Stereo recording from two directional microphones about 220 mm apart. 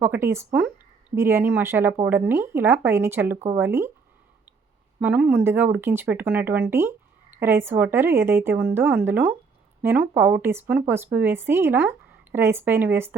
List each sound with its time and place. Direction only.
0.0 s speech: 10° right (ahead or behind)
4.9 s speech: 5° right (ahead or behind)